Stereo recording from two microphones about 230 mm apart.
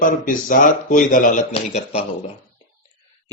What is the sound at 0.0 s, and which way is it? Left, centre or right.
Speech, left.